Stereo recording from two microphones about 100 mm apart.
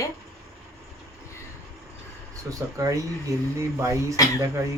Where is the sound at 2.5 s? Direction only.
30° right (ahead or behind).